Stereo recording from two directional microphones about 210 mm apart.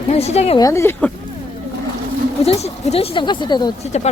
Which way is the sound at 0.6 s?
15° left (ahead or behind).